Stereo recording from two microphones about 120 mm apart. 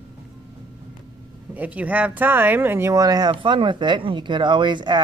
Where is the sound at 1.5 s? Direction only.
10° right (ahead or behind).